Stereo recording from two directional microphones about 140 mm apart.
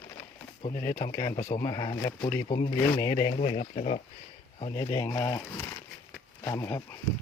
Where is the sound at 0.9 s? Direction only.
70° left (ahead or behind).